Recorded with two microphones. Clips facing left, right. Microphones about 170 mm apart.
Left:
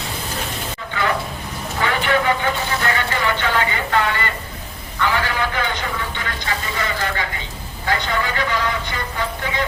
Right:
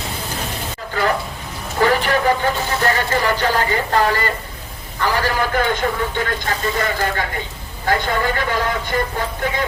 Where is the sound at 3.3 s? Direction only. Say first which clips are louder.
Right 3 dB; 40° right (ahead or behind).